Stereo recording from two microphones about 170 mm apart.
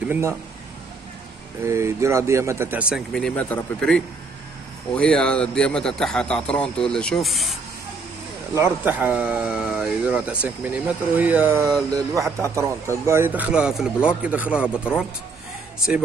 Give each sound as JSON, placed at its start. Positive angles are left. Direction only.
{"t": 0.1, "sound": "speech", "side_deg": -15}
{"t": 1.6, "sound": "a man's voice", "side_deg": -15}
{"t": 8.5, "sound": "speech", "side_deg": -15}